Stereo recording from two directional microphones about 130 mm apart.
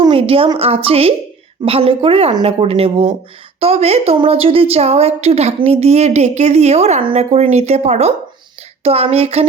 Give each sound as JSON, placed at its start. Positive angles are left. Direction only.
{"t": 0.0, "sound": "a woman's voice", "side_deg": -45}